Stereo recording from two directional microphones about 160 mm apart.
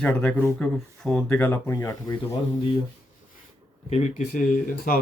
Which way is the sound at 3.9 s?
50° left (ahead or behind).